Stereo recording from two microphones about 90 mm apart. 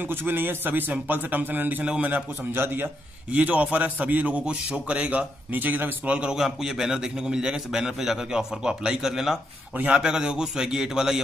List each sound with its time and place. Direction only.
0.0 s a man's voice: 25° right (ahead or behind); by 11.1 s 5° right (ahead or behind)